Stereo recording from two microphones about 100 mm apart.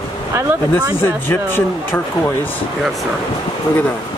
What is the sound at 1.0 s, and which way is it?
Speech, 25° left (ahead or behind).